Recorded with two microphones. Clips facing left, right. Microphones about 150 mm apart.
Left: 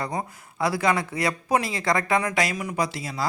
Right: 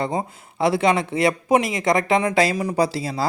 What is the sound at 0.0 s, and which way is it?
Speech, 25° right (ahead or behind).